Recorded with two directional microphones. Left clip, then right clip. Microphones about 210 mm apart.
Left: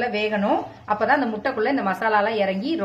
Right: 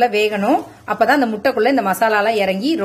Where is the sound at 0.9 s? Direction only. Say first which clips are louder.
Right 5 dB; 50° right (ahead or behind).